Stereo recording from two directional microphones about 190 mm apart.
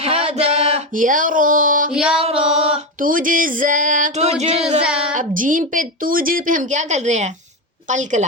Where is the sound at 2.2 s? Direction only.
30° right (ahead or behind).